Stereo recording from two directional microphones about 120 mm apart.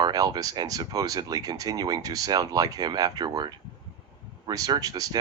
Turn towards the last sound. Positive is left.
turn(degrees=-30)  # may be behind; listen again after turning